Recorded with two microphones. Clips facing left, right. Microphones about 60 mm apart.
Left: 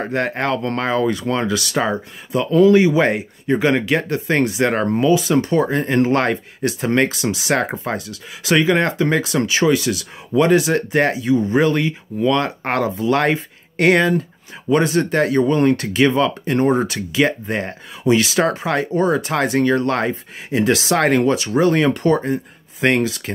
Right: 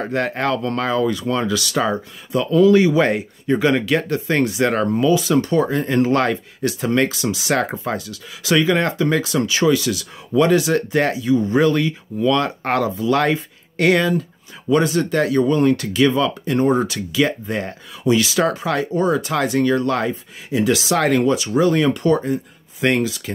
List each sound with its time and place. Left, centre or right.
0.0 s speech: left
2.7 s speech: left